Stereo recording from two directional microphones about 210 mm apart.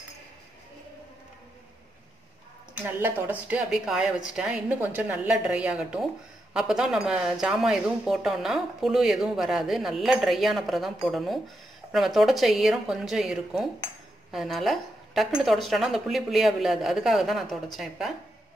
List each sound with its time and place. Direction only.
2.8 s a woman's voice: 10° right (ahead or behind)